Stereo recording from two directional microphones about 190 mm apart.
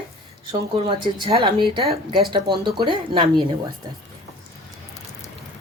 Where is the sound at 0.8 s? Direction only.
25° right (ahead or behind).